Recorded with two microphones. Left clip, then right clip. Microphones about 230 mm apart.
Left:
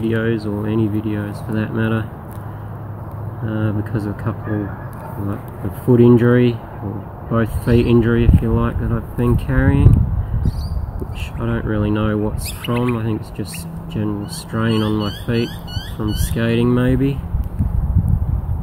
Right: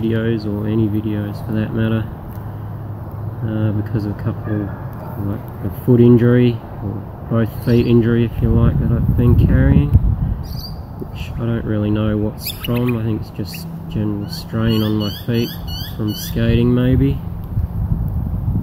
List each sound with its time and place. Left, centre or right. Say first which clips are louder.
0.0 s speech: even; centre
3.4 s speech: even; centre
5.9 s speech: even; centre
11.4 s speech: even; centre